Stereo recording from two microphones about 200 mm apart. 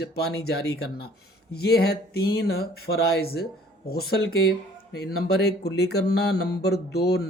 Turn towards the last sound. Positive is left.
turn(degrees=55)  # may be behind; listen again after turning